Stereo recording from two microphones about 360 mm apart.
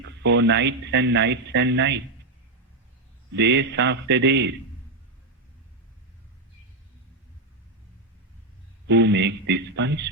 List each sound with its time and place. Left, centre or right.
0.0 s speech: right
3.3 s speech: right
8.9 s speech: right